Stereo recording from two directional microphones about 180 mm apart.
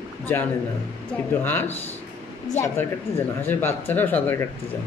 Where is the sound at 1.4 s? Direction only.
10° left (ahead or behind).